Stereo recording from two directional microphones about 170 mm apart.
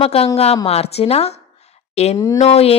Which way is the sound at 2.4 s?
35° left (ahead or behind).